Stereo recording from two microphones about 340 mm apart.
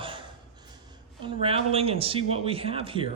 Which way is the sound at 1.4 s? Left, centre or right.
Centre.